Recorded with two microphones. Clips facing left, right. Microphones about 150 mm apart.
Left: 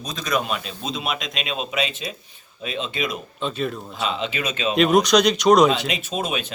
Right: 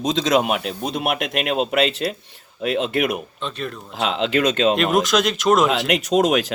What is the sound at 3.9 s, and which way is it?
Speech, 75° right (ahead or behind).